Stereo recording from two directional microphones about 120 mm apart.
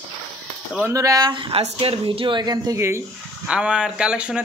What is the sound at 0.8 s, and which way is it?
Speech, 25° right (ahead or behind).